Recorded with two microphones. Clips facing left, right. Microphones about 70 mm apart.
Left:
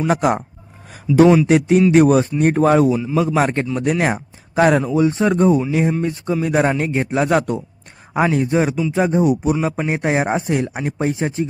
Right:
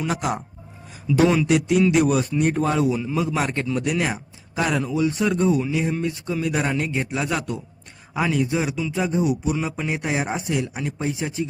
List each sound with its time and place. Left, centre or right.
0.1 s speech: left
1.1 s speech: centre
1.5 s speech: left
2.9 s a man's voice: centre
3.2 s speech: left
4.9 s speech: left
5.3 s speech: left